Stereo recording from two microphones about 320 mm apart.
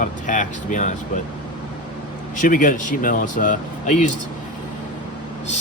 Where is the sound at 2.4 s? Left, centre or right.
Left.